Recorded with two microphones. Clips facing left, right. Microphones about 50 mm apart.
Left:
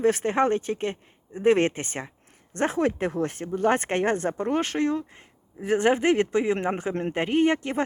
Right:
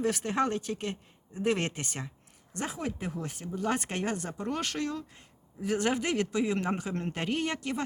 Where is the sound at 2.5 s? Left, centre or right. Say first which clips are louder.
Left 11 dB; left.